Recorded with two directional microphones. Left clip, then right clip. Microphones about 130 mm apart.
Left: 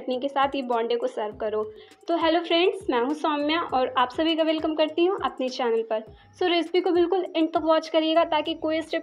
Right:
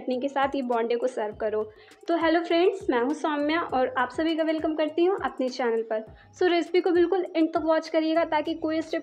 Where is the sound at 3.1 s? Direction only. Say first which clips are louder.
Left 1 dB; 10° right (ahead or behind).